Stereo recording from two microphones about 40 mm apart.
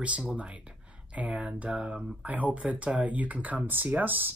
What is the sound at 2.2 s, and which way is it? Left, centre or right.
Speech, right.